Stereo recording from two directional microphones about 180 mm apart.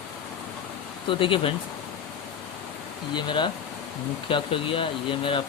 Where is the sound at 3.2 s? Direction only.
25° left (ahead or behind).